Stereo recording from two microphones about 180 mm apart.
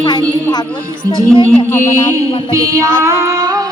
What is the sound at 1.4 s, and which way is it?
Music, 10° left (ahead or behind).